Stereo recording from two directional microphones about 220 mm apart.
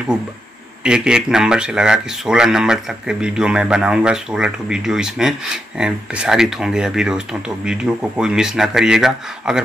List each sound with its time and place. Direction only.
0.8 s speech: 5° right (ahead or behind)